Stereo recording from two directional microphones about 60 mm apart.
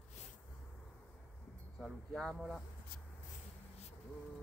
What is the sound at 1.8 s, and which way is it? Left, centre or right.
Speech, centre.